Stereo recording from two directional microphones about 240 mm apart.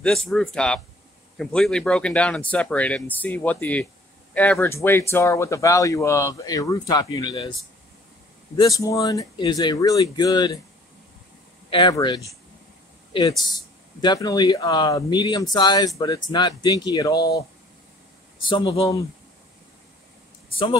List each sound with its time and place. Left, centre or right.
0.0 s speech: centre
8.5 s speech: centre
11.7 s speech: centre
14.0 s speech: centre
18.5 s speech: centre